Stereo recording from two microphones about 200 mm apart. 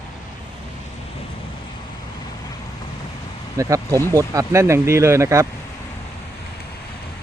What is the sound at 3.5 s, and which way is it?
Speech, 15° right (ahead or behind).